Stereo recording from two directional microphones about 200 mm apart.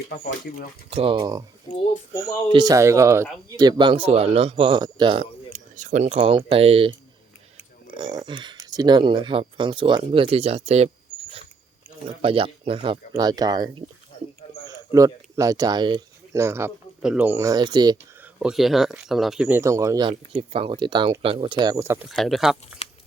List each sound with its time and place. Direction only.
0.9 s speech: 30° right (ahead or behind)
2.5 s speech: 20° right (ahead or behind)
12.0 s speech: 25° right (ahead or behind)
14.9 s speech: 15° right (ahead or behind)
18.3 s speech: 5° right (ahead or behind); by 21.5 s 30° right (ahead or behind)
21.6 s speech: 15° right (ahead or behind)
22.1 s speech: centre (ahead or behind)